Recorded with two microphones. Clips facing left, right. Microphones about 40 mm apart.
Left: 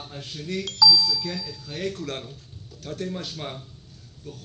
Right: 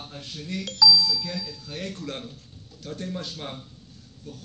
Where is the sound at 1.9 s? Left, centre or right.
Left.